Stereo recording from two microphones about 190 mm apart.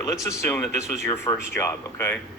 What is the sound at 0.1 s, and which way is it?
Speech, 15° left (ahead or behind).